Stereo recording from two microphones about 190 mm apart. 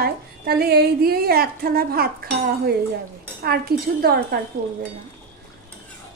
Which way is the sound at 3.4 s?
55° right (ahead or behind).